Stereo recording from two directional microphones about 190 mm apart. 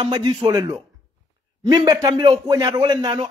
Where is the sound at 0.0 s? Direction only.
20° right (ahead or behind).